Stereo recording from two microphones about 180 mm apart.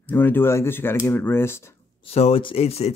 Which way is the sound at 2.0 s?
35° left (ahead or behind).